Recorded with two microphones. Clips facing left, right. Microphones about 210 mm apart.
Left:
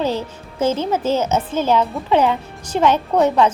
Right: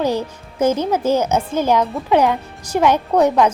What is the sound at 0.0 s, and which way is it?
A woman's voice, 15° right (ahead or behind).